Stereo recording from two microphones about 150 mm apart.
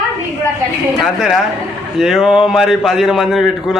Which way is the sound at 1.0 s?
Centre (ahead or behind).